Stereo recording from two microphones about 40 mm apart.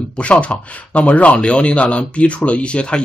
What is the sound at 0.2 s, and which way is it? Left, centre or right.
A man's voice, left.